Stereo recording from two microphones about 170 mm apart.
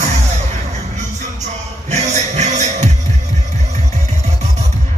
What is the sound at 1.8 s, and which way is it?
Music, 40° right (ahead or behind).